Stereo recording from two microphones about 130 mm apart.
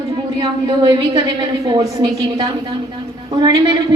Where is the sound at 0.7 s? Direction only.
35° right (ahead or behind).